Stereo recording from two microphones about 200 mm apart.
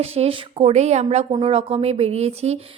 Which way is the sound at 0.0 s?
30° right (ahead or behind).